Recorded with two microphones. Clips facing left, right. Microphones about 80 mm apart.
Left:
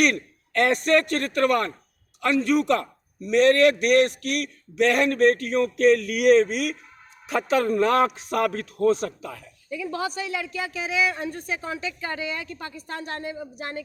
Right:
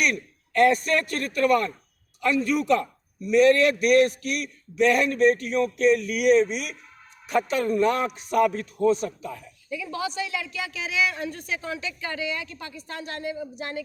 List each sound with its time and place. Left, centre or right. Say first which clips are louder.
0.0 s a man's voice: left 4 dB; left
3.2 s a man's voice: left 1 dB; left
9.7 s a woman's voice: left 1 dB; left